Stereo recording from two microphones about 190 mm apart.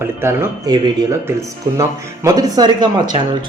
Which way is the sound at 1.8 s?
20° right (ahead or behind).